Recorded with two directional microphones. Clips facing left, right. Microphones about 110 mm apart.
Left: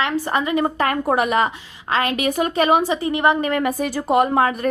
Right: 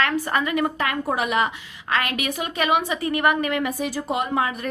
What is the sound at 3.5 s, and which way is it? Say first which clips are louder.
A woman's voice: left 4 dB; 45° left (ahead or behind).